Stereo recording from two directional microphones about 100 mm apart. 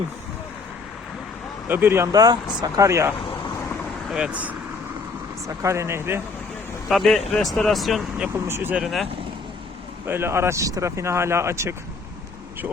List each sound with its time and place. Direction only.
1.6 s speech: 20° right (ahead or behind)
2.1 s speech: 40° right (ahead or behind)
4.1 s speech: 10° right (ahead or behind)
5.5 s speech: 30° right (ahead or behind)
6.8 s speech: centre (ahead or behind)
8.3 s speech: 20° right (ahead or behind)
8.7 s speech: centre (ahead or behind)
10.1 s speech: 25° right (ahead or behind)